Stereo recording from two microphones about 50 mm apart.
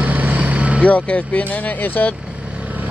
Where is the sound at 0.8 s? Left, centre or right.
Left.